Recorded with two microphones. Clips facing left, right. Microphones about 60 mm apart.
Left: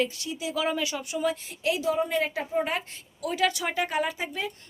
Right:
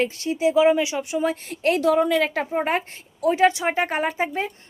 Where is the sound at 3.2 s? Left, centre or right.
Right.